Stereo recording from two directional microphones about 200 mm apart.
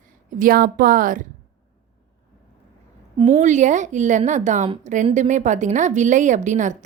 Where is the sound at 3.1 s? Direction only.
25° right (ahead or behind).